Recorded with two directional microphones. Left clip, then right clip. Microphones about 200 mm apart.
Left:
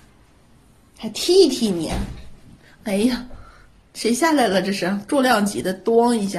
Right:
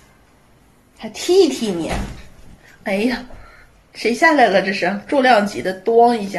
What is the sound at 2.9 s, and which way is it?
Speech, 20° left (ahead or behind).